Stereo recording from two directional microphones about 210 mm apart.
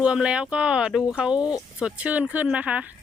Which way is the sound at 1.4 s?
20° left (ahead or behind).